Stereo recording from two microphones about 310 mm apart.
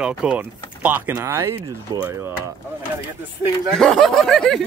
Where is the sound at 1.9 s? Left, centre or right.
Centre.